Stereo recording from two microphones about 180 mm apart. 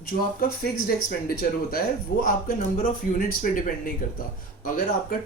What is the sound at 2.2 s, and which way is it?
Speech, 50° left (ahead or behind).